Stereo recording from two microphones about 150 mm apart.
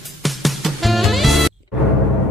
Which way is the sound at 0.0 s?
Centre (ahead or behind).